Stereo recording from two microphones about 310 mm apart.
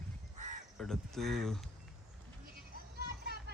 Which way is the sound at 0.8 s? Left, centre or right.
Centre.